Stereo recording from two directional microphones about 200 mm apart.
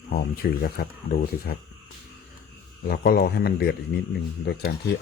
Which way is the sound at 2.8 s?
50° left (ahead or behind).